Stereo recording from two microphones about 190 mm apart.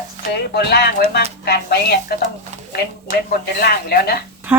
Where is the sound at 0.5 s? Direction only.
60° left (ahead or behind).